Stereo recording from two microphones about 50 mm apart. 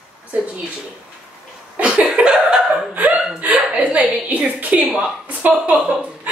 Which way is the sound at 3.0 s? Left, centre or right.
Right.